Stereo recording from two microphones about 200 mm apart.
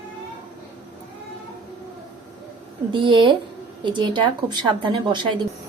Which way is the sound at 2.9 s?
25° right (ahead or behind).